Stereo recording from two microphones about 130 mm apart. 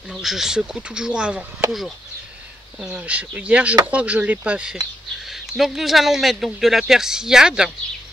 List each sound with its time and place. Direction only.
0.1 s speech: centre (ahead or behind)
2.8 s speech: 10° right (ahead or behind)